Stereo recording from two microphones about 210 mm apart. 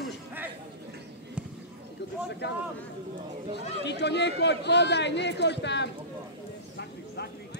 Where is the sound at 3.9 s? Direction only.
55° left (ahead or behind).